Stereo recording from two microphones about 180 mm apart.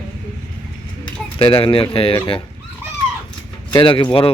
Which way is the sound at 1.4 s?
30° left (ahead or behind).